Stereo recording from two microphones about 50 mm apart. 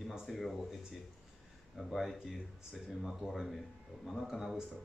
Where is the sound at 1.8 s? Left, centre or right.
Centre.